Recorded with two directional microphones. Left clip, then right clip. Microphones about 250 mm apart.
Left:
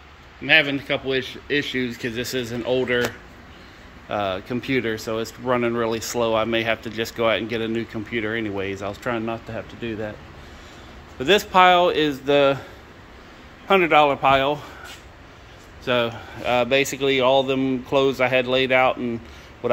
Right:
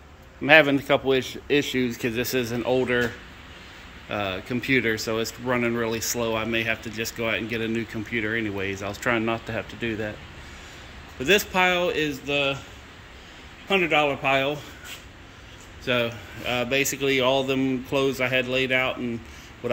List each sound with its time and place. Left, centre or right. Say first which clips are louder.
0.4 s a man's voice: right 1 dB; centre
4.1 s speech: left 4 dB; centre
11.2 s speech: left 5 dB; centre
12.3 s a man's voice: left 8 dB; left
13.7 s speech: left 5 dB; centre
15.8 s speech: left 3 dB; centre